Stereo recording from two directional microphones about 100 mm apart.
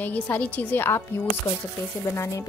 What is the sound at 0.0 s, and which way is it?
A woman's voice, 15° left (ahead or behind).